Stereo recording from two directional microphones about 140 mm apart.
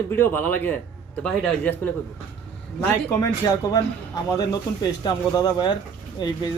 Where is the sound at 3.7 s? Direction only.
25° left (ahead or behind).